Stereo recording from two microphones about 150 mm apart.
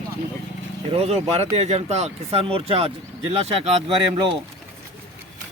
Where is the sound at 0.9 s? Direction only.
45° right (ahead or behind).